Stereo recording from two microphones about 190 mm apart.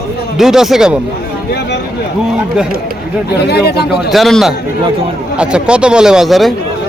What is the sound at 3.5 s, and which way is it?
Speech, 60° left (ahead or behind).